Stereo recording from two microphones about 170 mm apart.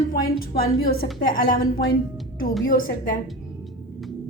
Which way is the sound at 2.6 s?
55° left (ahead or behind).